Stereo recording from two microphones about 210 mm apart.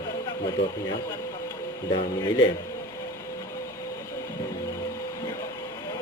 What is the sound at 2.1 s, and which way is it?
Speech, 20° left (ahead or behind).